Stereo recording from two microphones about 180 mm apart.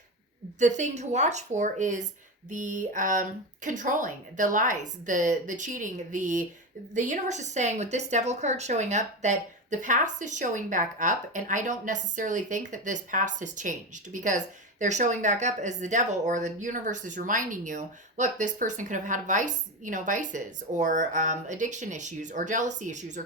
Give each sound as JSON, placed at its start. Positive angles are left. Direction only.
{"t": 0.6, "sound": "a woman's voice", "side_deg": -40}